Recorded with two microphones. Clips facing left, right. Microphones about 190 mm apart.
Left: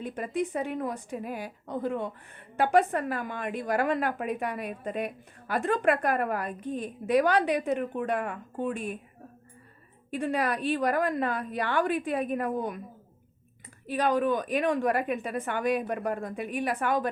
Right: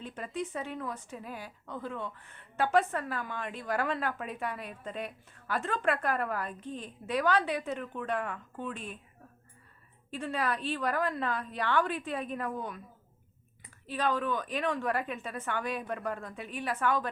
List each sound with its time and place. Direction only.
0.0 s a woman's voice: 15° left (ahead or behind)
3.2 s speech: 50° left (ahead or behind)
3.4 s a woman's voice: 15° left (ahead or behind)
8.2 s speech: 50° left (ahead or behind)
8.7 s a woman's voice: 10° left (ahead or behind)
10.3 s a woman's voice: 15° left (ahead or behind)
13.8 s a woman's voice: 15° left (ahead or behind)